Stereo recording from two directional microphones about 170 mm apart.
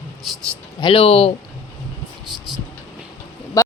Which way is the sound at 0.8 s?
30° left (ahead or behind).